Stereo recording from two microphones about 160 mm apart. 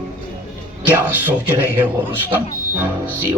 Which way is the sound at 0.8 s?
10° right (ahead or behind).